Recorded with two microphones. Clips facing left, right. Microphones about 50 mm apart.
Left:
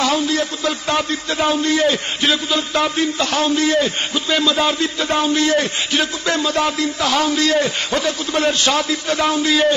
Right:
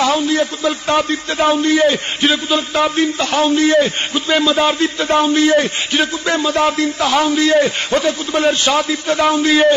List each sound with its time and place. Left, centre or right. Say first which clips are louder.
0.0 s a man's voice: right 3 dB; centre
3.4 s a man's voice: right 5 dB; right